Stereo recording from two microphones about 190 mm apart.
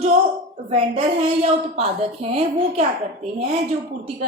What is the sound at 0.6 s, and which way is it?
A woman's voice, 30° right (ahead or behind).